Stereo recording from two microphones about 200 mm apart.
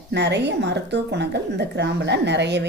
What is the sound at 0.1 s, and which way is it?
A woman's voice, 60° right (ahead or behind).